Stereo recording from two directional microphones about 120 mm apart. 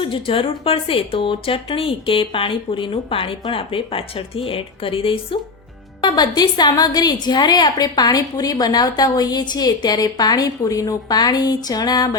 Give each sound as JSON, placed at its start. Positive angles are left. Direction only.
{"t": 0.0, "sound": "speech", "side_deg": 45}
{"t": 6.0, "sound": "a woman's voice", "side_deg": 35}